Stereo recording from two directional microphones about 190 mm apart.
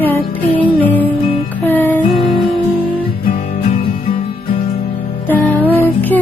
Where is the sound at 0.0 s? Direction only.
10° left (ahead or behind).